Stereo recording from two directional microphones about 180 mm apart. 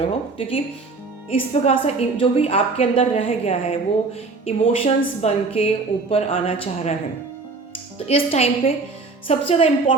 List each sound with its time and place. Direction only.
0.0 s a woman's voice: 30° left (ahead or behind)
7.9 s a woman's voice: 35° left (ahead or behind)